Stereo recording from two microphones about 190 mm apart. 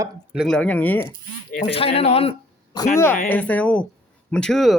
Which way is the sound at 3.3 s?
10° left (ahead or behind).